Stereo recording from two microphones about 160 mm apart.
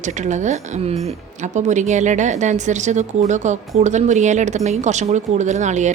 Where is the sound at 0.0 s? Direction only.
50° right (ahead or behind).